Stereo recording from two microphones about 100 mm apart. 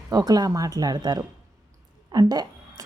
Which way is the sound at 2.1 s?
40° right (ahead or behind).